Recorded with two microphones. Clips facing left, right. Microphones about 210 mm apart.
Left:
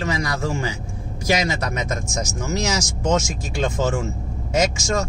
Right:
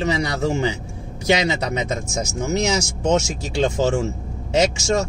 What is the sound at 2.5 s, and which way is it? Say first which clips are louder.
Speech: right 3 dB; 60° right (ahead or behind).